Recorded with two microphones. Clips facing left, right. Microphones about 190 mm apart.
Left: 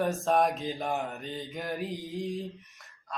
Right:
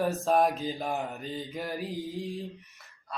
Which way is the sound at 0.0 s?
Centre (ahead or behind).